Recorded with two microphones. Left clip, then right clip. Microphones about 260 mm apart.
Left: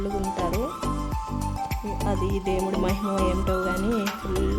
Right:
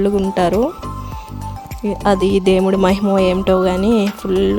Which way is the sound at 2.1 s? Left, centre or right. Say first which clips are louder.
Right 14 dB; right.